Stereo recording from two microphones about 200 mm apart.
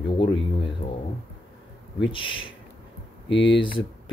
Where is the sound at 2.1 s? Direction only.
25° left (ahead or behind).